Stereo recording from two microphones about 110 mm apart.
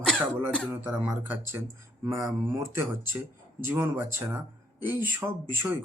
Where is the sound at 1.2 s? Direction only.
20° right (ahead or behind).